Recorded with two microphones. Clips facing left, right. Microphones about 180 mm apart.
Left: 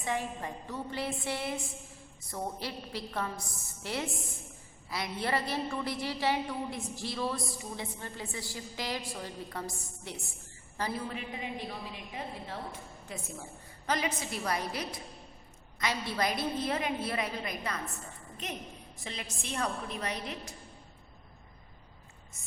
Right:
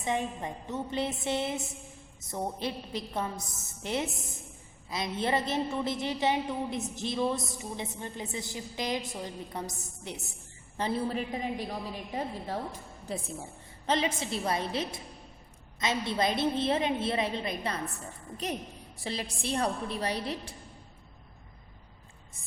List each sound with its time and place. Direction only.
0.0 s a woman's voice: 20° right (ahead or behind)
11.0 s a woman's voice: 40° right (ahead or behind)